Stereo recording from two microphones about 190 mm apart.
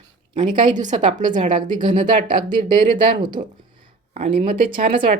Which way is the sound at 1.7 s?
25° right (ahead or behind).